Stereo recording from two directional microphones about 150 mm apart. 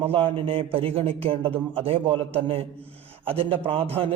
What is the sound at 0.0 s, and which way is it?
A man's voice, 35° right (ahead or behind).